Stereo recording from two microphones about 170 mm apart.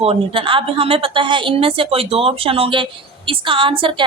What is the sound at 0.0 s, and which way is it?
A woman's voice, 35° right (ahead or behind).